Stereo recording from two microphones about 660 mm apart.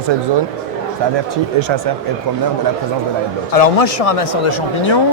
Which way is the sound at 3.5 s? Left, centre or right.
Left.